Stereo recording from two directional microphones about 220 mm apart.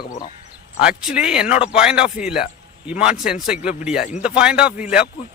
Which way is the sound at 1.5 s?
25° left (ahead or behind).